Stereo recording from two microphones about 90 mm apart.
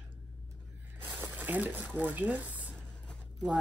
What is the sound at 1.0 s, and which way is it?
Speech, 20° right (ahead or behind).